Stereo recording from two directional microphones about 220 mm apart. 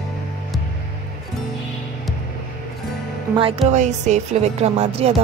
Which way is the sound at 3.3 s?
25° right (ahead or behind).